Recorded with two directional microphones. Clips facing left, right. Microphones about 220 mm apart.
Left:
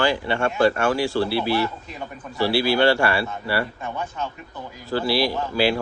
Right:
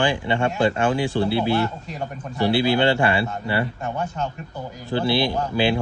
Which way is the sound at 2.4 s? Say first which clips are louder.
Even; 20° right (ahead or behind).